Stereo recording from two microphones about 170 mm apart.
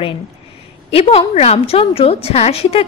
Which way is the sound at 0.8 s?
35° left (ahead or behind).